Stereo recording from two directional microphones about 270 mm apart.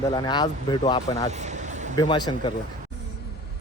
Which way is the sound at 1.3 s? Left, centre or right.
Right.